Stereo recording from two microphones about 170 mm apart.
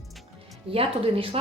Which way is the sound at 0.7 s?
35° right (ahead or behind).